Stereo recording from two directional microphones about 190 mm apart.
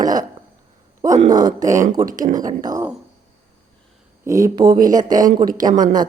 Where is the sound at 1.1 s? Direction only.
40° right (ahead or behind).